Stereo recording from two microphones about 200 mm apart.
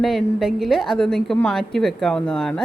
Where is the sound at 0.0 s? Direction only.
Centre (ahead or behind).